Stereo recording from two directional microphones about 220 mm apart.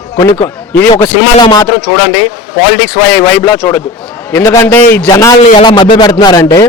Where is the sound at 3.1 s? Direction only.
10° left (ahead or behind).